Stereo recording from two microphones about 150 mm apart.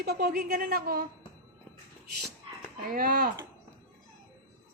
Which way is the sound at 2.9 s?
70° right (ahead or behind).